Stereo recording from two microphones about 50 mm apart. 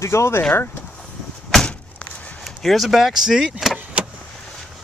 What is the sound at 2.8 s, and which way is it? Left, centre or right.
Speech, centre.